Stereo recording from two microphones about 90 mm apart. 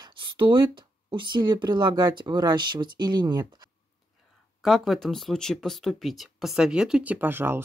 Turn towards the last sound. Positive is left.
turn(degrees=-25)  # may be behind; listen again after turning